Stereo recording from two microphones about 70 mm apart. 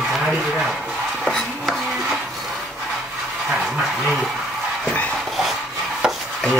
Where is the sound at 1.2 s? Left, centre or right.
Centre.